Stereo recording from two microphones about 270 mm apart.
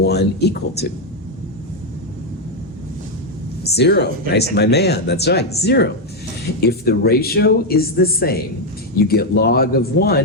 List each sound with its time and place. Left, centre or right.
0.0 s speech: left
3.6 s speech: left